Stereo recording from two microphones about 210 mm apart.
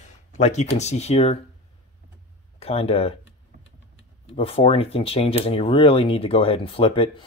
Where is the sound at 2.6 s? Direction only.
30° left (ahead or behind).